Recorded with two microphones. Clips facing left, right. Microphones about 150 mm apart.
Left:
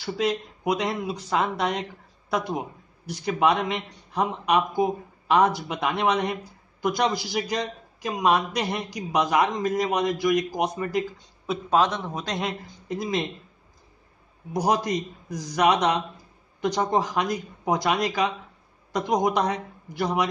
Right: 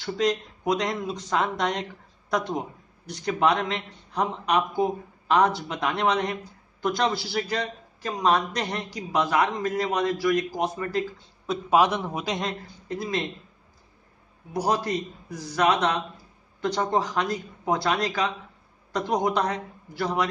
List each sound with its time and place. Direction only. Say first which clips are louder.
0.0 s speech: right 1 dB; 10° left (ahead or behind)
11.7 s a man's voice: right 1 dB; 10° right (ahead or behind)
12.6 s speech: left 2 dB; 15° left (ahead or behind)
14.5 s speech: left 2 dB; 15° left (ahead or behind)